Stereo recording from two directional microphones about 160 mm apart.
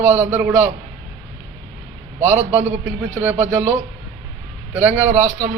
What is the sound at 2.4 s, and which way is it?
Speech, 45° right (ahead or behind).